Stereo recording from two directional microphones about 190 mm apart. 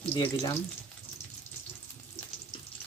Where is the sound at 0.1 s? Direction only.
15° left (ahead or behind).